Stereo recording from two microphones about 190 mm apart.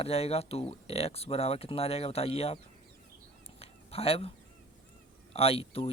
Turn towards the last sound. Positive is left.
turn(degrees=30)  # may be behind; listen again after turning